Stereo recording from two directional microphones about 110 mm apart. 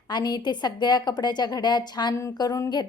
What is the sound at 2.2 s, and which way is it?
Speech, 30° left (ahead or behind).